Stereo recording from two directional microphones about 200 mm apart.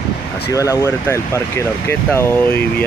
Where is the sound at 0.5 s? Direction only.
15° left (ahead or behind).